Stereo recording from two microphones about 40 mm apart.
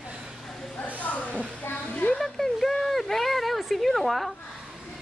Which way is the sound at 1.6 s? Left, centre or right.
Left.